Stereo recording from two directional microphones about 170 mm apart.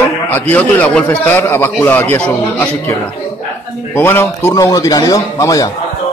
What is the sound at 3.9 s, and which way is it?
A man's voice, 15° left (ahead or behind).